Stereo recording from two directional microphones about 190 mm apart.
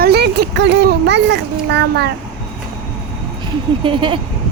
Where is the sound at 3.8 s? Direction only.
25° right (ahead or behind).